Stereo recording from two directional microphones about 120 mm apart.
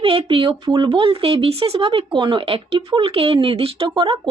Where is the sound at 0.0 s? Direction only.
50° right (ahead or behind).